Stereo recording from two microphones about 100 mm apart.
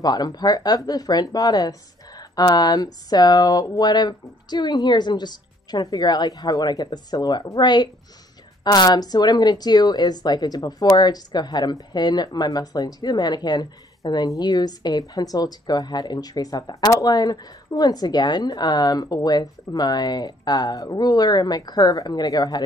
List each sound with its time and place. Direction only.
0.0 s a woman's voice: 45° left (ahead or behind)